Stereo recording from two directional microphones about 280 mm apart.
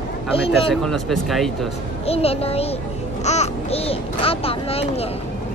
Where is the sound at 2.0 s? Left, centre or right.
Left.